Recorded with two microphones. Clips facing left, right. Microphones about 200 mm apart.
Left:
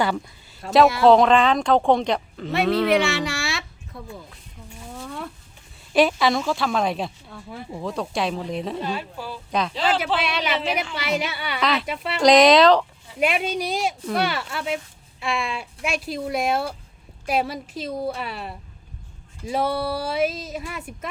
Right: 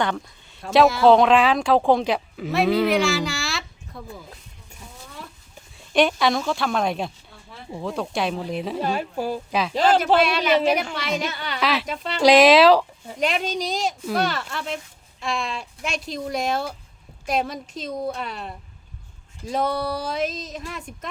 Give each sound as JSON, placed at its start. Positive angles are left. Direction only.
{"t": 0.6, "sound": "speech", "side_deg": 0}
{"t": 5.9, "sound": "speech", "side_deg": 0}
{"t": 8.8, "sound": "speech", "side_deg": -45}
{"t": 9.5, "sound": "speech", "side_deg": -5}
{"t": 9.7, "sound": "speech", "side_deg": -45}
{"t": 10.9, "sound": "speech", "side_deg": 5}
{"t": 13.1, "sound": "speech", "side_deg": 5}